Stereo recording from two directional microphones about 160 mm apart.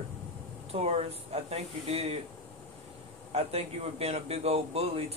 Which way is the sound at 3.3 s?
40° right (ahead or behind).